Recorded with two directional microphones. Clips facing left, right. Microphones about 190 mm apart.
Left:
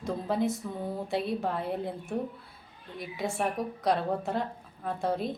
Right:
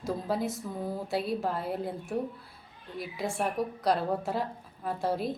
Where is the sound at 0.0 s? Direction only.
Centre (ahead or behind).